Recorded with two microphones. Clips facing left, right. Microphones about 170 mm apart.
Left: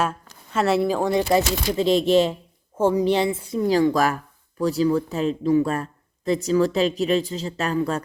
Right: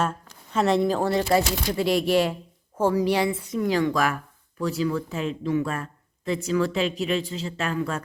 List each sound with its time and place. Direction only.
0.5 s speech: 5° left (ahead or behind)
1.3 s a woman's voice: 20° left (ahead or behind); by 8.0 s 35° left (ahead or behind)